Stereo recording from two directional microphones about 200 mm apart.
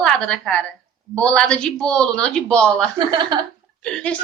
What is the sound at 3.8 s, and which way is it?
Speech, 5° left (ahead or behind).